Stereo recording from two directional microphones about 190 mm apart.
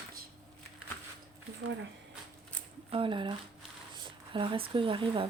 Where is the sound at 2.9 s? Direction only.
25° right (ahead or behind).